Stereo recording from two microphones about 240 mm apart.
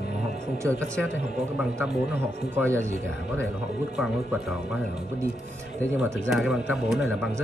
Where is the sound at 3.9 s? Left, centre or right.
Centre.